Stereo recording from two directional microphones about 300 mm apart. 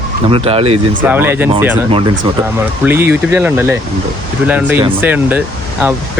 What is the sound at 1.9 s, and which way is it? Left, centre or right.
Speech, centre.